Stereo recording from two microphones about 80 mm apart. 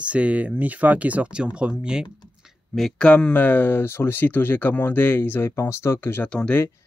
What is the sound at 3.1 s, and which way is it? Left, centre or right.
Speech, centre.